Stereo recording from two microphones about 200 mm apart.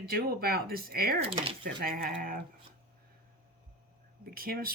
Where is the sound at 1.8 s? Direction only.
45° right (ahead or behind).